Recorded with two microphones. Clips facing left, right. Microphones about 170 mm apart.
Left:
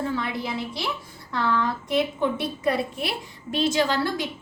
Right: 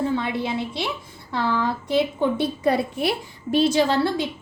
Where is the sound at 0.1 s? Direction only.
25° right (ahead or behind).